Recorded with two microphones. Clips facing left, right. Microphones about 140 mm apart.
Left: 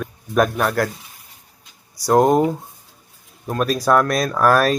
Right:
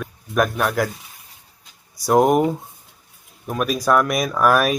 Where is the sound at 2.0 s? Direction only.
15° right (ahead or behind).